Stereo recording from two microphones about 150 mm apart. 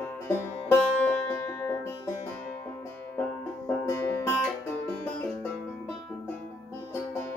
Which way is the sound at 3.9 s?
20° left (ahead or behind).